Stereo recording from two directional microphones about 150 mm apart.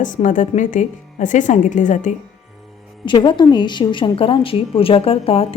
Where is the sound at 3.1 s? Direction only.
30° left (ahead or behind).